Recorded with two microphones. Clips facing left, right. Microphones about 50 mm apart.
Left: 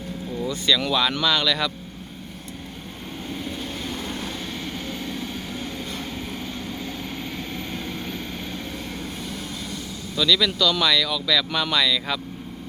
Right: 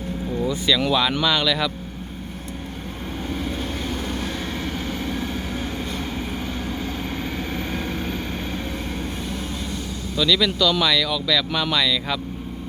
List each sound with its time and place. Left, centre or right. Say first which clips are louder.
0.4 s speech: right 1 dB; centre
7.3 s vehicle: right 4 dB; right
7.7 s vehicle: right 4 dB; right
10.2 s speech: right 1 dB; centre